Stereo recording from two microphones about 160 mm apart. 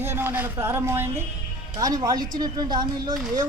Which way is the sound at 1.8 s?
25° right (ahead or behind).